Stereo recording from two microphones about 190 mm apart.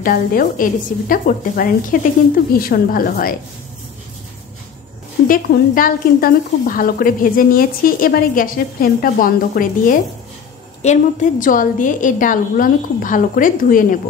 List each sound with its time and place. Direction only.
0.0 s speech: 50° left (ahead or behind)
5.3 s speech: 45° left (ahead or behind)